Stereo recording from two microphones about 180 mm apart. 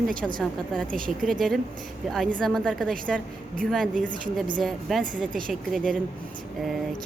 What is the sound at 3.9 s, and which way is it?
Speech, 50° right (ahead or behind).